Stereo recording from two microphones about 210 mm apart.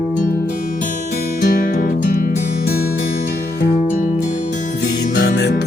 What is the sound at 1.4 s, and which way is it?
Music, 45° left (ahead or behind).